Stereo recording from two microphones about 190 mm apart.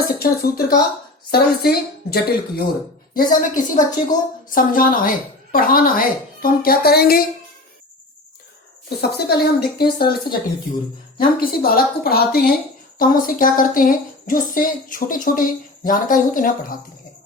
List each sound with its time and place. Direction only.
0.2 s a woman's voice: 55° left (ahead or behind)
8.9 s a woman's voice: 60° left (ahead or behind)